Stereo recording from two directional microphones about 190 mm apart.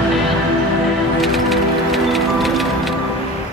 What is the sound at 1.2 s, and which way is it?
Music, centre (ahead or behind).